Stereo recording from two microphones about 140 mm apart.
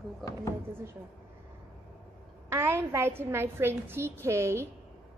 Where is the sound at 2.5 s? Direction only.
20° right (ahead or behind).